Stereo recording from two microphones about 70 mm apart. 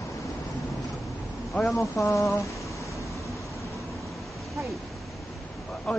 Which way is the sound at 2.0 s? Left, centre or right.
Left.